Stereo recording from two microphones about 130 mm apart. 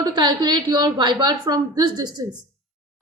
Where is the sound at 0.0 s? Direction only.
35° right (ahead or behind).